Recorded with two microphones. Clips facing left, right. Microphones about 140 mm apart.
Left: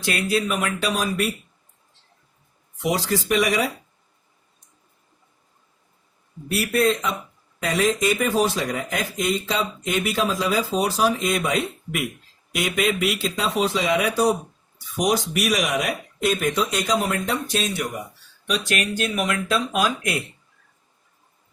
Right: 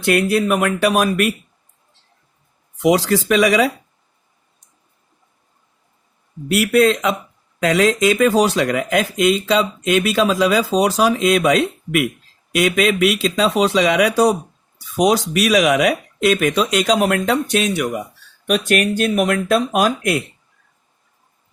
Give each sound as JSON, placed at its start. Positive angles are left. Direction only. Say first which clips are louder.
{"t": 0.0, "sound": "speech", "louder": "right 7 dB", "side_deg": -60}
{"t": 2.8, "sound": "speech", "louder": "right 8 dB", "side_deg": -90}
{"t": 6.5, "sound": "speech", "louder": "right 6 dB", "side_deg": -80}
{"t": 18.4, "sound": "speech", "louder": "right 8 dB", "side_deg": -60}